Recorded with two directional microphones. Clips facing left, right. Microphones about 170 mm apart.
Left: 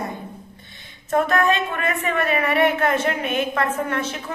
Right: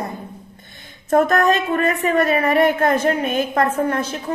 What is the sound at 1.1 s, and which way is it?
A woman's voice, 45° right (ahead or behind).